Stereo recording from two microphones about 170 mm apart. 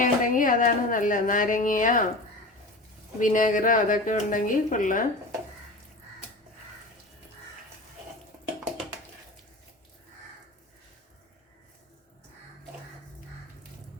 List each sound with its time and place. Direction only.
0.0 s a woman's voice: 50° left (ahead or behind)
3.2 s a woman's voice: 50° left (ahead or behind)